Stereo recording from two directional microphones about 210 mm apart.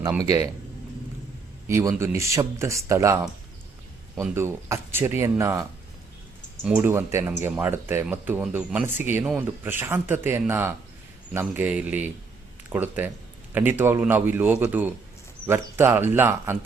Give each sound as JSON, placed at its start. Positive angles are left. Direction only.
{"t": 0.2, "sound": "speech", "side_deg": -15}
{"t": 1.6, "sound": "speech", "side_deg": -15}
{"t": 4.2, "sound": "speech", "side_deg": -10}
{"t": 6.7, "sound": "speech", "side_deg": -10}